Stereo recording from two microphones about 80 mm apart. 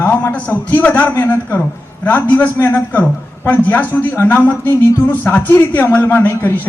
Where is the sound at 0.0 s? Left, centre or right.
Left.